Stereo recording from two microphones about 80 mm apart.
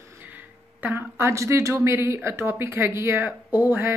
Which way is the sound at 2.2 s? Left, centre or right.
Right.